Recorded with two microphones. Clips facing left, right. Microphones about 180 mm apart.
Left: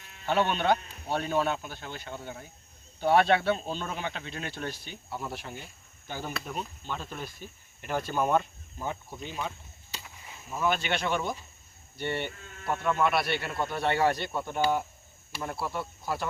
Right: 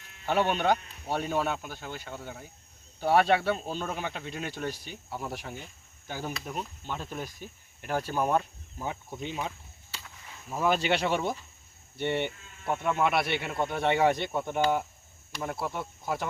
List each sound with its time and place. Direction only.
0.3 s speech: 10° right (ahead or behind)
9.2 s speech: 25° right (ahead or behind)
9.9 s a sound: 15° left (ahead or behind)
10.6 s speech: 35° right (ahead or behind); by 16.2 s 20° right (ahead or behind)